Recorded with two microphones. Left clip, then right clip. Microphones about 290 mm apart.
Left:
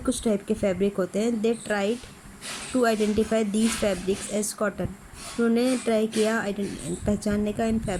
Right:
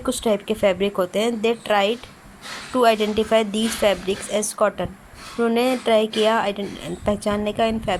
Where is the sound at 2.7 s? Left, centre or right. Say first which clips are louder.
Right 6 dB; right.